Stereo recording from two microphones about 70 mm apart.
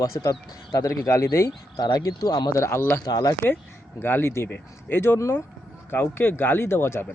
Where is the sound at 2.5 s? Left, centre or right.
Left.